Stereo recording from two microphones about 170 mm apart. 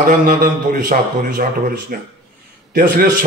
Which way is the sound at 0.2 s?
55° right (ahead or behind).